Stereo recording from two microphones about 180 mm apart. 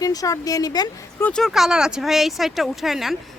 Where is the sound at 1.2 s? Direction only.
5° left (ahead or behind).